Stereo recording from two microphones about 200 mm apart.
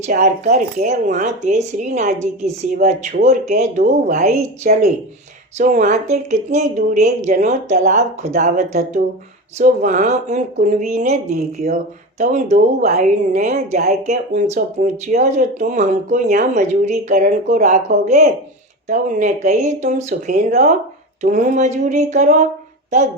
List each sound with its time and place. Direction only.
0.0 s speech: 35° right (ahead or behind)